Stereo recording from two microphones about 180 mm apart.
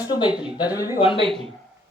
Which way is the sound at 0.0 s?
20° left (ahead or behind).